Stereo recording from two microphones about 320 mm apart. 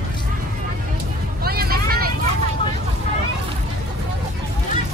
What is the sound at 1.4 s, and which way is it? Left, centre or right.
Vehicle, right.